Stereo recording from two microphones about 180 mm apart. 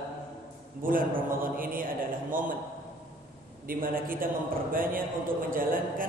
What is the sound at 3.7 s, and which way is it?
A man's voice, 50° right (ahead or behind).